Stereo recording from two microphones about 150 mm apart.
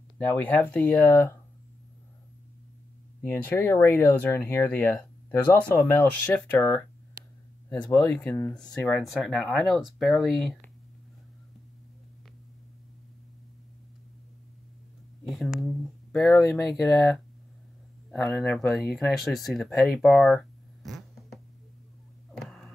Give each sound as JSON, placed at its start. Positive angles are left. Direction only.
{"t": 0.3, "sound": "speech", "side_deg": 10}
{"t": 3.2, "sound": "speech", "side_deg": 15}
{"t": 7.9, "sound": "speech", "side_deg": 15}
{"t": 9.0, "sound": "speech", "side_deg": 0}
{"t": 15.2, "sound": "speech", "side_deg": 0}
{"t": 22.3, "sound": "a sound", "side_deg": 5}